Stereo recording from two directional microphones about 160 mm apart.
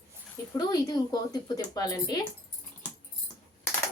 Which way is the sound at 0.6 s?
25° left (ahead or behind).